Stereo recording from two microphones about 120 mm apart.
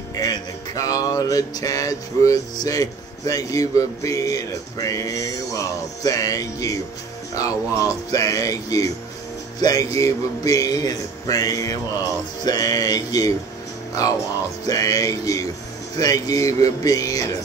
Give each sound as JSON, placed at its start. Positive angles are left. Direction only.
{"t": 0.1, "sound": "music", "side_deg": 30}
{"t": 9.6, "sound": "speech", "side_deg": 30}
{"t": 14.7, "sound": "music", "side_deg": 30}